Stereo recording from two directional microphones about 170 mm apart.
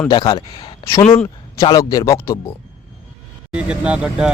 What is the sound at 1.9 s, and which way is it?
Speech, 20° left (ahead or behind).